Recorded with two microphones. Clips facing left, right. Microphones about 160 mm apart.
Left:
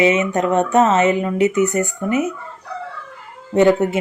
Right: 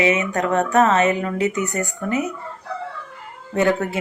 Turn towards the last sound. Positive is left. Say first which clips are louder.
# left 6 dB
turn(degrees=20)  # may be behind; listen again after turning